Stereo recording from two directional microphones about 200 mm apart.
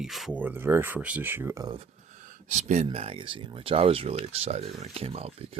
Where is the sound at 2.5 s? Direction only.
35° right (ahead or behind).